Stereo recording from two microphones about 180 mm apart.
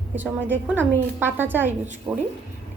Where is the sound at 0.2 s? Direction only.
10° right (ahead or behind).